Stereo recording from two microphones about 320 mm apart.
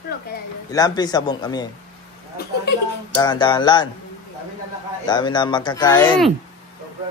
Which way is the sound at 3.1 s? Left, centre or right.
Centre.